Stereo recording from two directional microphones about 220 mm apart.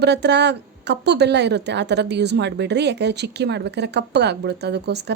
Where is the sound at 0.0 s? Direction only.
50° right (ahead or behind).